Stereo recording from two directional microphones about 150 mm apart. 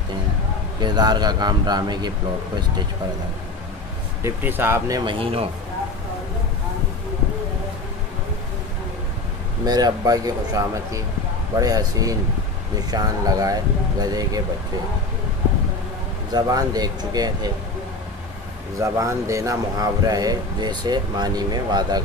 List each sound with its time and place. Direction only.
0.7 s speech: 30° right (ahead or behind)
4.2 s speech: 15° right (ahead or behind)
5.2 s speech: 40° right (ahead or behind)
9.7 s speech: 25° right (ahead or behind)
16.3 s speech: 25° right (ahead or behind)
18.8 s speech: 20° right (ahead or behind)